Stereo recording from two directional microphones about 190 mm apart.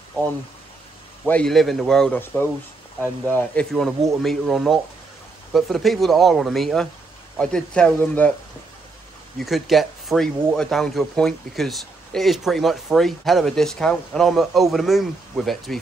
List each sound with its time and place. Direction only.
1.2 s speech: 5° left (ahead or behind)
9.4 s speech: centre (ahead or behind)